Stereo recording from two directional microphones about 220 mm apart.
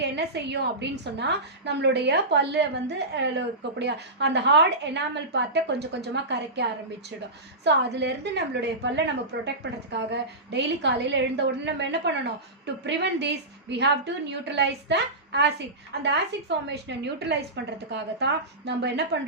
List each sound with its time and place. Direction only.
0.0 s a woman's voice: 50° right (ahead or behind)